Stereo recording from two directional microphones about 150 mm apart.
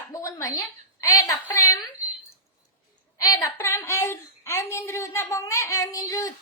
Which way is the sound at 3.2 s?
25° left (ahead or behind).